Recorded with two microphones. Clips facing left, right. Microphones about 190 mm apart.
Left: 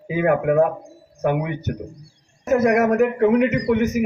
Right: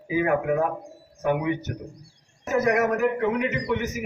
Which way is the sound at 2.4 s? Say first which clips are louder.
Left 5 dB; 55° left (ahead or behind).